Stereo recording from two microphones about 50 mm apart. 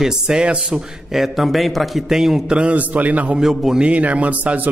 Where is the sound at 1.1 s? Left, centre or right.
Centre.